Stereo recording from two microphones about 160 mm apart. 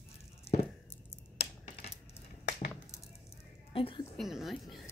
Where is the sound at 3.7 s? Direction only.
35° left (ahead or behind).